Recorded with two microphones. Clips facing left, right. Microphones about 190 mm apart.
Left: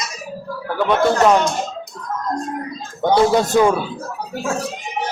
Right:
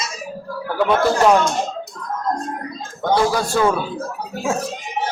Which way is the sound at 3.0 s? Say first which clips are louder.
Left 3 dB; 20° left (ahead or behind).